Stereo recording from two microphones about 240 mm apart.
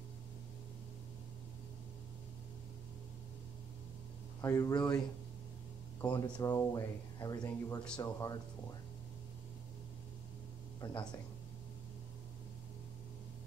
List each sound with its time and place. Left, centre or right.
4.4 s speech: centre
5.9 s speech: centre
10.8 s speech: centre